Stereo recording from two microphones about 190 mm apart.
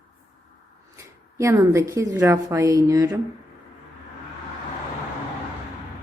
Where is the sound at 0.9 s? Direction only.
15° right (ahead or behind).